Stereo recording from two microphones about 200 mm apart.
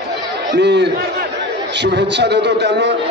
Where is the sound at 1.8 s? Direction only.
60° right (ahead or behind).